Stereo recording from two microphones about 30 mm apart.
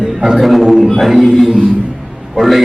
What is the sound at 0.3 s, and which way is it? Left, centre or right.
Music, centre.